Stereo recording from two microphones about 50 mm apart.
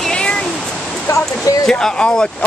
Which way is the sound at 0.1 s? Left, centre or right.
Centre.